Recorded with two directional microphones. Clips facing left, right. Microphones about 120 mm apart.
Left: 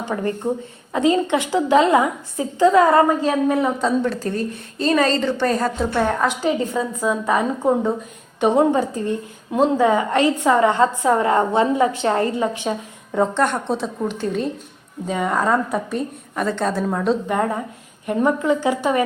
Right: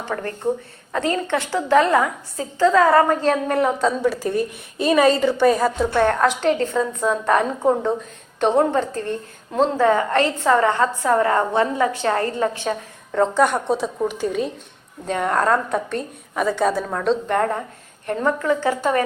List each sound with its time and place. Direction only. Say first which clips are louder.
0.0 s a woman's voice: left 1 dB; 15° left (ahead or behind)
3.1 s a woman's voice: left 1 dB; 5° left (ahead or behind)
13.3 s a woman's voice: right 2 dB; 5° right (ahead or behind)
16.8 s a woman's voice: left 1 dB; 5° left (ahead or behind)